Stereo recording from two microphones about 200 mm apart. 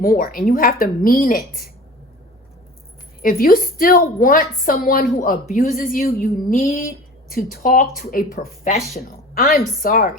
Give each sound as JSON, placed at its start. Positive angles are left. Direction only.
{"t": 0.0, "sound": "a woman's voice", "side_deg": 45}
{"t": 3.2, "sound": "a woman's voice", "side_deg": 45}
{"t": 9.0, "sound": "a sound", "side_deg": 45}
{"t": 9.8, "sound": "a woman's voice", "side_deg": 45}